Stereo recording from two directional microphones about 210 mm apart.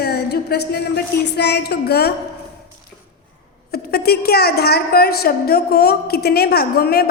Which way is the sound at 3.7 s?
45° left (ahead or behind).